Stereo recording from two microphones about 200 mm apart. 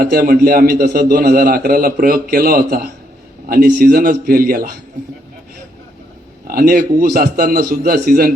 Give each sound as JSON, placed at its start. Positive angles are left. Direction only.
{"t": 0.0, "sound": "a man's voice", "side_deg": -45}
{"t": 6.5, "sound": "a man's voice", "side_deg": -45}